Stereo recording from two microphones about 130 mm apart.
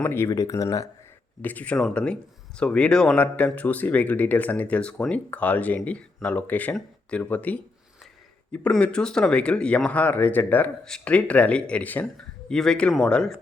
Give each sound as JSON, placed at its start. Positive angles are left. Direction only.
{"t": 0.0, "sound": "speech", "side_deg": 20}
{"t": 1.4, "sound": "speech", "side_deg": 10}